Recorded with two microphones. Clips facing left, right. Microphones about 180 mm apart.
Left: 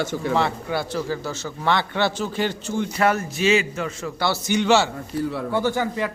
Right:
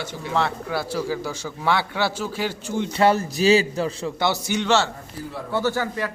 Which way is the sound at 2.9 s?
30° right (ahead or behind).